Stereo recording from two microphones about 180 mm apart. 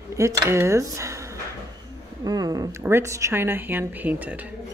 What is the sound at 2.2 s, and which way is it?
A woman's voice, 20° right (ahead or behind).